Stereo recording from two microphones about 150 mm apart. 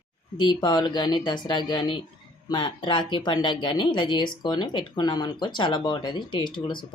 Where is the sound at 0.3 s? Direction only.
30° left (ahead or behind).